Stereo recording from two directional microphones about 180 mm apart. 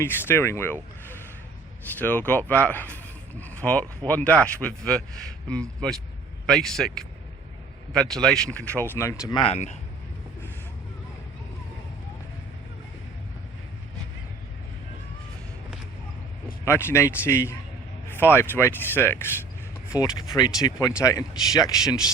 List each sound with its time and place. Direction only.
0.0 s speech: 10° left (ahead or behind)
9.3 s speech: 30° left (ahead or behind)
16.6 s speech: 15° left (ahead or behind)